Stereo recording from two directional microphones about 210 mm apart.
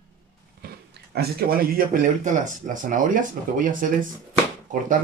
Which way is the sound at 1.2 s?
45° right (ahead or behind).